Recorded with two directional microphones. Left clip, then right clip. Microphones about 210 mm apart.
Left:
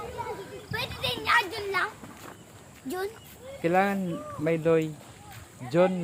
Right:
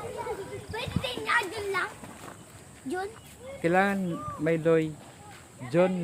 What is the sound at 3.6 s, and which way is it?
Speech, 5° left (ahead or behind).